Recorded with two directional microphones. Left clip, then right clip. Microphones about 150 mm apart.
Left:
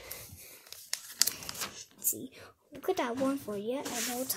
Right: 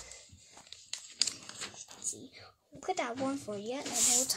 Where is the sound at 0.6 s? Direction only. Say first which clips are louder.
Left 4 dB; 40° left (ahead or behind).